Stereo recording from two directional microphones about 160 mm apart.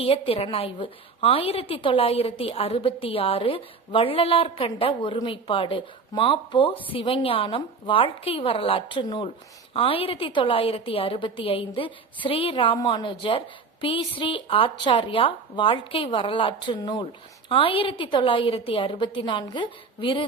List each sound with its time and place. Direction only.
0.0 s a woman's voice: 35° left (ahead or behind)